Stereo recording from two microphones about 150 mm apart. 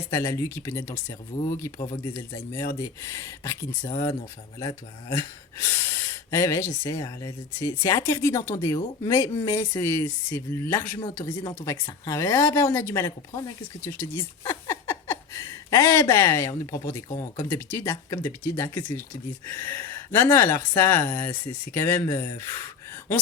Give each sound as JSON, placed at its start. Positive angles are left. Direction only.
{"t": 0.1, "sound": "speech", "side_deg": 20}